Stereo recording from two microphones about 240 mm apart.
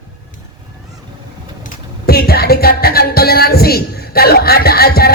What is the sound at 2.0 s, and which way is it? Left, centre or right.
Speech, left.